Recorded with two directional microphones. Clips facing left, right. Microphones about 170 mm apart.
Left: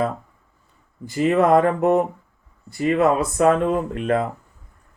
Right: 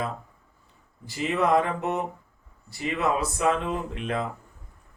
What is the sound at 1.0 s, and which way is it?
Speech, 50° left (ahead or behind).